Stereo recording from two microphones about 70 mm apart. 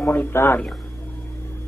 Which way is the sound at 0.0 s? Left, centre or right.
Left.